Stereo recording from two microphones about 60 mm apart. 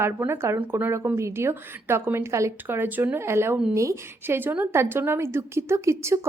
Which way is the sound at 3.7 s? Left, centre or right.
Right.